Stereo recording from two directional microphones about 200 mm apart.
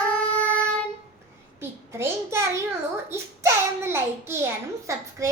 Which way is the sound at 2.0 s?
15° right (ahead or behind).